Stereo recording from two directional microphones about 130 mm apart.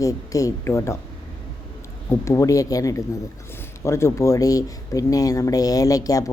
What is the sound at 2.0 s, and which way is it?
Speech, 25° left (ahead or behind).